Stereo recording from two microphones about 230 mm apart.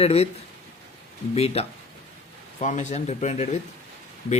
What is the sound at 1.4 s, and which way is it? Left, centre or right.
Speech, left.